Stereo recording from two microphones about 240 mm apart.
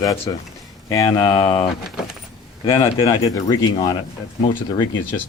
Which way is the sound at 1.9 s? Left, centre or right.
Centre.